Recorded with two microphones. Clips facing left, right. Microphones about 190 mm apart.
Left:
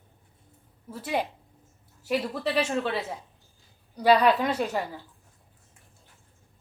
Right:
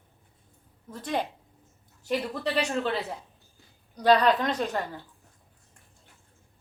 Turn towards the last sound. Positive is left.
turn(degrees=10)  # may be behind; listen again after turning